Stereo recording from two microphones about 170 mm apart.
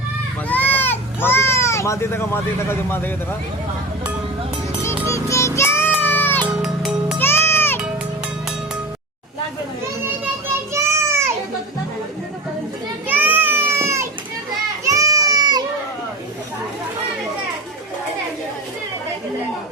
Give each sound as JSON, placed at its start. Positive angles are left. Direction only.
{"t": 0.4, "sound": "a sound", "side_deg": 10}
{"t": 5.0, "sound": "music", "side_deg": 15}
{"t": 6.6, "sound": "music", "side_deg": 0}
{"t": 7.2, "sound": "music", "side_deg": 15}
{"t": 10.8, "sound": "child singing", "side_deg": -15}
{"t": 13.1, "sound": "a sound", "side_deg": -10}
{"t": 14.8, "sound": "goat", "side_deg": -20}